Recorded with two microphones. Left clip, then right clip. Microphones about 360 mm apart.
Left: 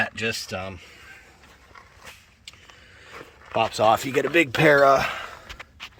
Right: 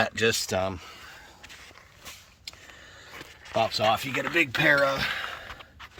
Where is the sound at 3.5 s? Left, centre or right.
Centre.